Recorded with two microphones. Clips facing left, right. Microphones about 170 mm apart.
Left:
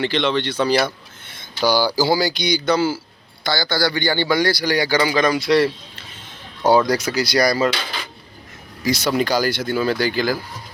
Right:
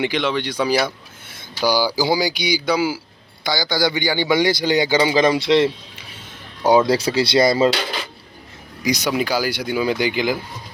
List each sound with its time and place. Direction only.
0.0 s a man's voice: 10° right (ahead or behind)
8.8 s speech: 15° right (ahead or behind)